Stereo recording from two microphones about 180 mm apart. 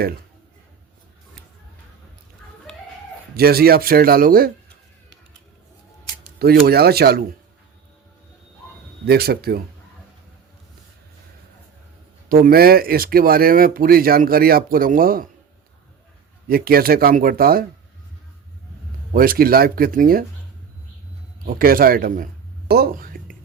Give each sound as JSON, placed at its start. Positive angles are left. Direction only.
{"t": 3.3, "sound": "speech", "side_deg": -60}
{"t": 6.4, "sound": "speech", "side_deg": -60}
{"t": 9.0, "sound": "speech", "side_deg": -60}
{"t": 12.3, "sound": "speech", "side_deg": -55}
{"t": 16.5, "sound": "speech", "side_deg": -55}
{"t": 19.1, "sound": "speech", "side_deg": -50}
{"t": 21.4, "sound": "speech", "side_deg": -55}
{"t": 22.7, "sound": "whispering", "side_deg": -55}